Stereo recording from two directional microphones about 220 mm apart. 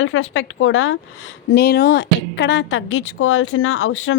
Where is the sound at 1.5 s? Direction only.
45° left (ahead or behind).